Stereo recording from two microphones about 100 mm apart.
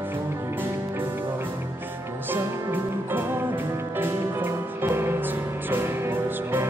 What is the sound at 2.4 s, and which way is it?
Music, 20° right (ahead or behind).